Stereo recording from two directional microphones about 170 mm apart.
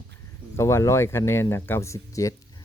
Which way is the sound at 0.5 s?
15° left (ahead or behind).